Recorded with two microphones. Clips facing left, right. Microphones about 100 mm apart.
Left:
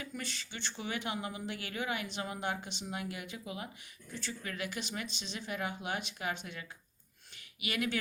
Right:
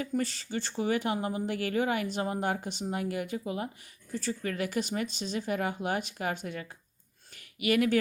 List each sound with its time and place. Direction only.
0.0 s speech: 40° right (ahead or behind)